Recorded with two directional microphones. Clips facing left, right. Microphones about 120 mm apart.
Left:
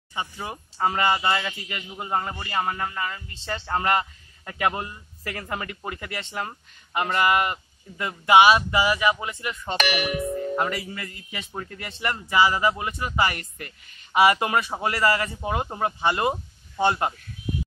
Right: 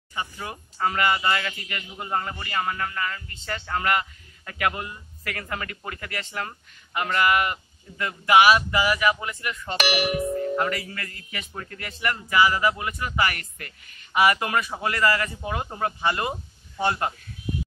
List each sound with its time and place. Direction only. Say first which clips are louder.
0.1 s speech: left 1 dB; 25° left (ahead or behind)